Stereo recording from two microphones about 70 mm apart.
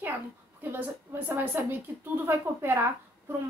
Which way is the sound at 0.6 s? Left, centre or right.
Right.